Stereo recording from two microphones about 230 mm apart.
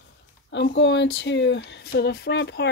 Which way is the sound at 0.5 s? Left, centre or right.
Left.